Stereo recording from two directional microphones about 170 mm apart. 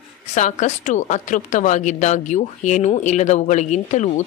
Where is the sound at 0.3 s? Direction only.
45° left (ahead or behind).